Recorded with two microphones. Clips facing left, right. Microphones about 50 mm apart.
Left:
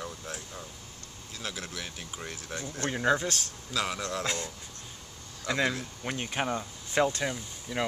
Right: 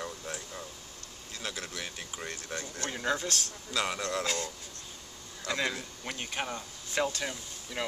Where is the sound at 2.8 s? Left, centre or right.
Centre.